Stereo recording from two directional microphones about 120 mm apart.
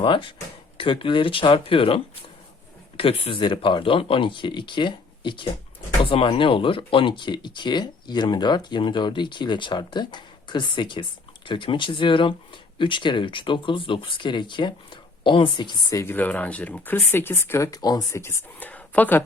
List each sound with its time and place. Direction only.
0.0 s speech: 45° left (ahead or behind)
3.0 s speech: 50° left (ahead or behind)
15.9 s speech: 25° left (ahead or behind)
16.1 s speech: 15° left (ahead or behind)